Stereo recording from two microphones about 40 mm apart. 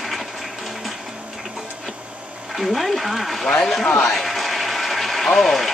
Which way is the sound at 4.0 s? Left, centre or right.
Centre.